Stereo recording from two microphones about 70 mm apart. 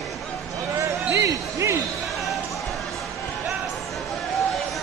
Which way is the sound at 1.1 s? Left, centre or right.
Right.